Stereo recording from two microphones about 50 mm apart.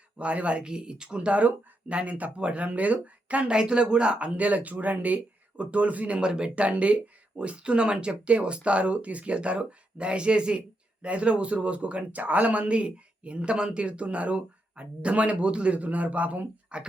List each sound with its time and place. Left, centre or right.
0.2 s speech: right